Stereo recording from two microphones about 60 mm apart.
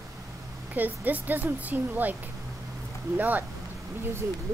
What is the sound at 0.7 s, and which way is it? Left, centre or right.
Speech, right.